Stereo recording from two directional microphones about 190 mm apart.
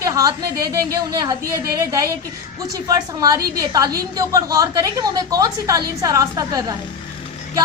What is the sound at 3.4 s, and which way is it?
Speech, 50° right (ahead or behind).